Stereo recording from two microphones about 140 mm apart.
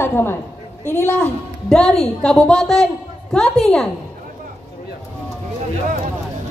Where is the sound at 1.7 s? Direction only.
5° left (ahead or behind).